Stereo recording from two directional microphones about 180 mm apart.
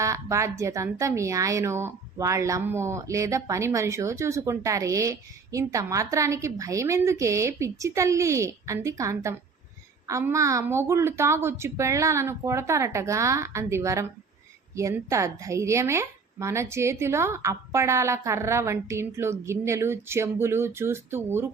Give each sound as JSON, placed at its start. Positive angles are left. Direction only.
{"t": 0.0, "sound": "speech", "side_deg": -15}